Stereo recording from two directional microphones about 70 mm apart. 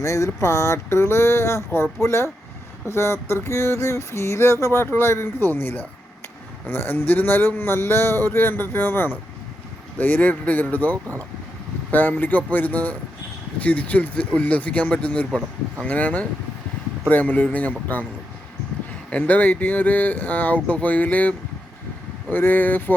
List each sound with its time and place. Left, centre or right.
0.0 s a man's voice: left
19.1 s speech: left